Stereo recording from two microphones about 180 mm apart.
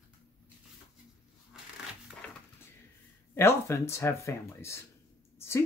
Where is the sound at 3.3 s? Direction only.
15° left (ahead or behind).